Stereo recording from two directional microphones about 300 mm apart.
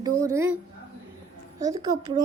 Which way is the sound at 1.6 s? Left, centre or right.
Centre.